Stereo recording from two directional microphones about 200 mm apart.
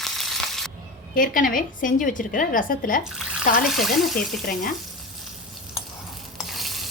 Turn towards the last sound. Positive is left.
turn(degrees=0)  # may be behind; listen again after turning